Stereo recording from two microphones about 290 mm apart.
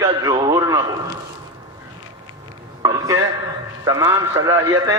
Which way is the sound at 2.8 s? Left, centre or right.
Centre.